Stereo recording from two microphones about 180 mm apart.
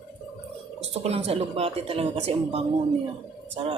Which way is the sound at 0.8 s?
35° right (ahead or behind).